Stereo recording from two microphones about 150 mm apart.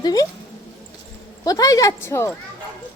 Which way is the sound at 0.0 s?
25° left (ahead or behind).